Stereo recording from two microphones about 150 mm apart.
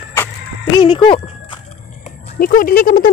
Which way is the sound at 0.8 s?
35° left (ahead or behind).